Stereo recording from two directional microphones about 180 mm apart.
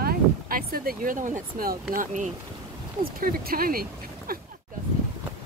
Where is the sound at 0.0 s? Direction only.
55° right (ahead or behind).